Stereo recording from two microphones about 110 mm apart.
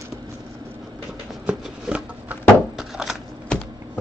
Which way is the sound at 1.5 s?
10° right (ahead or behind).